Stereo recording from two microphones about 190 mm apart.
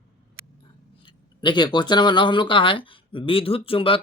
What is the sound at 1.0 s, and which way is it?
Speech, 25° left (ahead or behind).